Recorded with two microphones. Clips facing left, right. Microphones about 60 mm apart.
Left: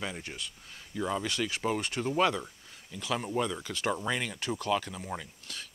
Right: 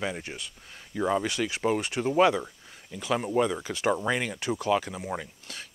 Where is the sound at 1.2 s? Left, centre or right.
Centre; by 3.6 s right.